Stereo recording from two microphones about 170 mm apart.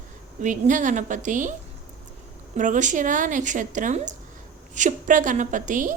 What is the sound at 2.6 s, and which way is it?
Speech, 45° right (ahead or behind).